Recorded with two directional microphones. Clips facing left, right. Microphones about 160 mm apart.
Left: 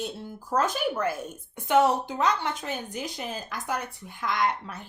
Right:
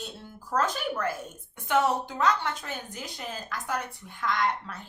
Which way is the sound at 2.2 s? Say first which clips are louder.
Even; 20° left (ahead or behind).